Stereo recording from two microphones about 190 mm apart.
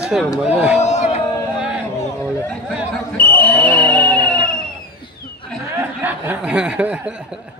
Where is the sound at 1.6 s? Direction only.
5° right (ahead or behind).